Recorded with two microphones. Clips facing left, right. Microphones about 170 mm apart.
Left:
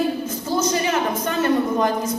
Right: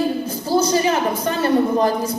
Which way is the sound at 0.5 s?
35° right (ahead or behind).